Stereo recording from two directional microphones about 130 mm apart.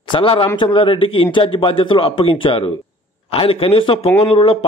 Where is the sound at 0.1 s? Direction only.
45° left (ahead or behind).